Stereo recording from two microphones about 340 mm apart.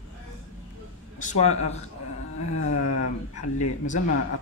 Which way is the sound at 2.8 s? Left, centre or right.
Left.